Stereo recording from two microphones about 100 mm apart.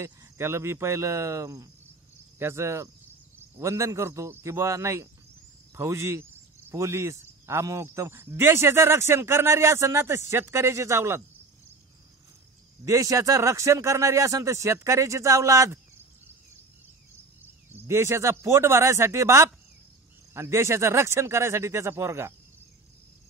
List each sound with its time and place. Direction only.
0.0 s speech: 30° right (ahead or behind)
12.8 s speech: 35° right (ahead or behind)
17.6 s speech: 25° right (ahead or behind)